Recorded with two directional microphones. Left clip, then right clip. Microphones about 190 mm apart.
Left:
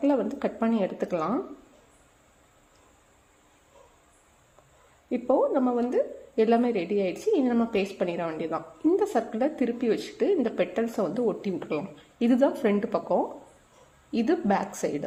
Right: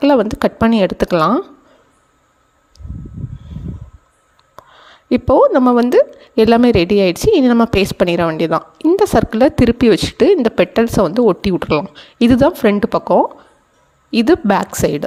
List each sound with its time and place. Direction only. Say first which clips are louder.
0.0 s a woman's voice: right 13 dB; 45° right (ahead or behind)
5.0 s a woman's voice: right 13 dB; 50° right (ahead or behind)